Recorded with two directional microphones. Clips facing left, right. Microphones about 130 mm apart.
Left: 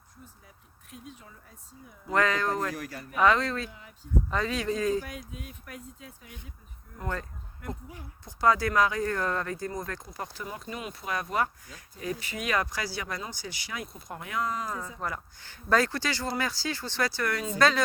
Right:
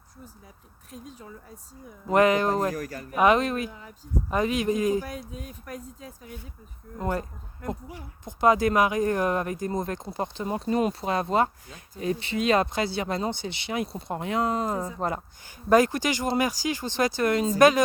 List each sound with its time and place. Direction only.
0.9 s speech: 35° right (ahead or behind)
2.1 s speech: 20° right (ahead or behind)
2.7 s speech: 45° right (ahead or behind)
3.2 s speech: 15° right (ahead or behind)
5.0 s speech: 40° right (ahead or behind)
7.0 s speech: 25° right (ahead or behind)
8.2 s speech: 20° right (ahead or behind)
10.5 s speech: 40° right (ahead or behind)
11.0 s speech: 25° right (ahead or behind)
14.6 s speech: 40° right (ahead or behind)
15.4 s speech: 15° right (ahead or behind)